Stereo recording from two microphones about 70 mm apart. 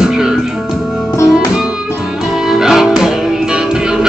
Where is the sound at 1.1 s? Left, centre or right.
Left.